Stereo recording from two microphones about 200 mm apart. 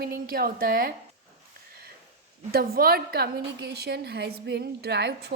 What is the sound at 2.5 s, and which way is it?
A woman's voice, 50° right (ahead or behind).